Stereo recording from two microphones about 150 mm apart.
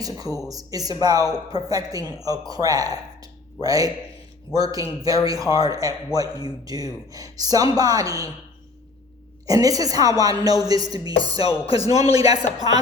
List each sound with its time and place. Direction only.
0.3 s a man's voice: 25° right (ahead or behind)
9.5 s a man's voice: 25° right (ahead or behind)